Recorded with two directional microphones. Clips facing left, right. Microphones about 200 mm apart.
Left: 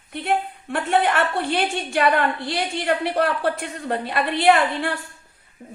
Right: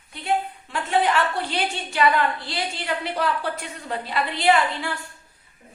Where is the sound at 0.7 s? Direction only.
55° left (ahead or behind).